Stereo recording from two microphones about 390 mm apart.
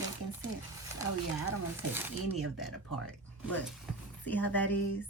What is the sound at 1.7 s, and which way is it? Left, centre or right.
Speech, centre.